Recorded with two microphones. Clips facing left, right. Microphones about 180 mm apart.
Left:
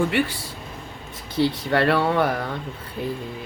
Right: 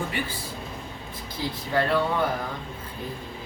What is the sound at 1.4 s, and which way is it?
Speech, 75° left (ahead or behind).